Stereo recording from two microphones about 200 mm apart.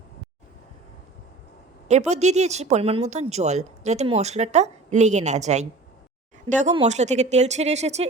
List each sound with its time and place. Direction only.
1.9 s speech: 35° right (ahead or behind)